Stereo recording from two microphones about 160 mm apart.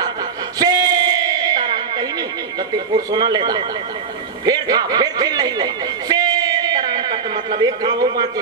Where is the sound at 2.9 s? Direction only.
25° right (ahead or behind).